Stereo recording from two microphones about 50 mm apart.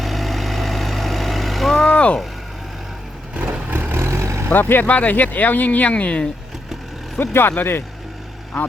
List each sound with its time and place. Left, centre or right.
0.0 s vehicle: centre
1.9 s mechanisms: left
3.3 s vehicle: right
3.7 s vehicle: right
4.4 s speech: left
4.9 s speech: left
7.2 s speech: left